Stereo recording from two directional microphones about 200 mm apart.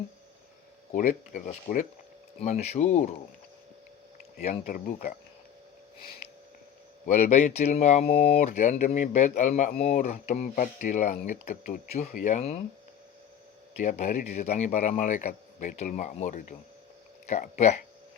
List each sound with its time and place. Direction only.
0.9 s speech: 40° left (ahead or behind)
4.4 s speech: 40° left (ahead or behind)
7.3 s speech: 35° left (ahead or behind)
13.7 s speech: 35° left (ahead or behind)